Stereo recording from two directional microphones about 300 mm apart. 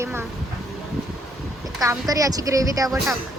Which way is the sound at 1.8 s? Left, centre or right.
Centre.